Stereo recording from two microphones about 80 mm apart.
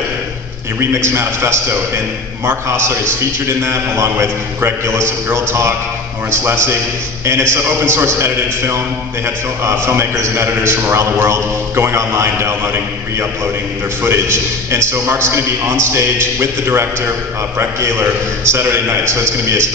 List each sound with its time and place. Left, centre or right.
0.7 s a man's voice: right